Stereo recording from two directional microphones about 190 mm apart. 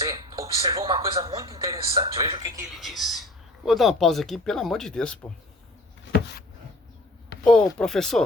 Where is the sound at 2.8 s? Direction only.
Centre (ahead or behind).